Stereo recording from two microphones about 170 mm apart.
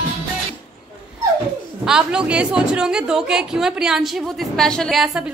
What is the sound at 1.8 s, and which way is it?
A woman's voice, 5° right (ahead or behind).